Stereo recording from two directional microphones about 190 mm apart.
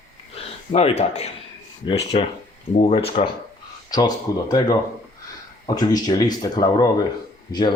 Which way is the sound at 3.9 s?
20° left (ahead or behind).